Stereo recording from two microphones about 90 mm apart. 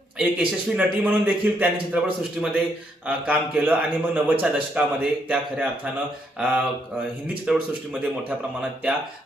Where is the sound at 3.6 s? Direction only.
15° right (ahead or behind).